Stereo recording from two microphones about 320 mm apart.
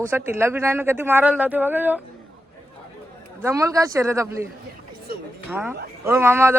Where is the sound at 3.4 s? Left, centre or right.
Centre.